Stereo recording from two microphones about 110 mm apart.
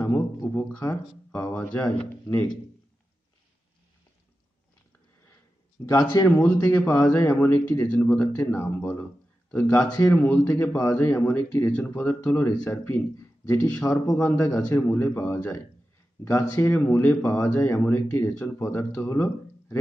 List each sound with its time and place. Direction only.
0.4 s speech: 15° left (ahead or behind)
5.9 s speech: 25° left (ahead or behind)
13.8 s speech: 30° left (ahead or behind)